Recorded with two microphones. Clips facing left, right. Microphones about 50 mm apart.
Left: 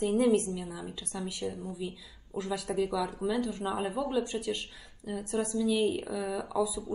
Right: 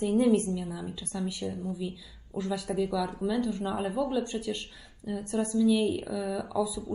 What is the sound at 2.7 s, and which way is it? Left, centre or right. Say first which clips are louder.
Speech: even; left.